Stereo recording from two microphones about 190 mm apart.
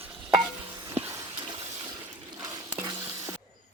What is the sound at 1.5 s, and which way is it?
Toilet flush, 30° right (ahead or behind).